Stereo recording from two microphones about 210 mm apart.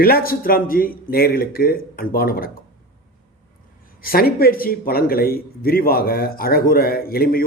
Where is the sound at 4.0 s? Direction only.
45° left (ahead or behind).